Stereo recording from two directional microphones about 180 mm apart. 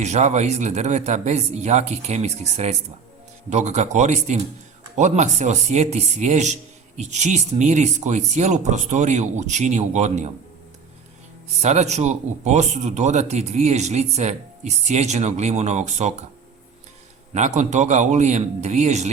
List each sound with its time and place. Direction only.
0.0 s a man's voice: 40° right (ahead or behind)
11.6 s a man's voice: 40° right (ahead or behind)
17.3 s a man's voice: 40° right (ahead or behind)